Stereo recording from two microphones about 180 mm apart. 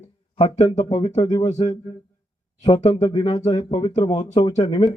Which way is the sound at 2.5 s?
35° left (ahead or behind).